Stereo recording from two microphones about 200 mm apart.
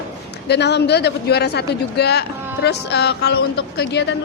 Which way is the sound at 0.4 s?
55° left (ahead or behind).